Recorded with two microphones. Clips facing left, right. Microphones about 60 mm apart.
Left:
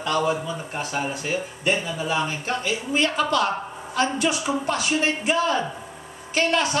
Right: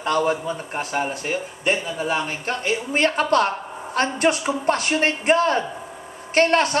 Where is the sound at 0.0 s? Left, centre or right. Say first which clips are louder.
Right 2 dB; right.